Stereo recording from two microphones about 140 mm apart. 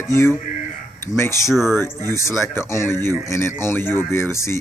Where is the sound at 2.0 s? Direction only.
20° left (ahead or behind).